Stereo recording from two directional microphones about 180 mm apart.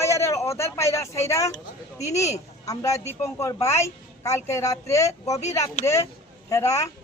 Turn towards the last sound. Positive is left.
turn(degrees=15)  # may be behind; listen again after turning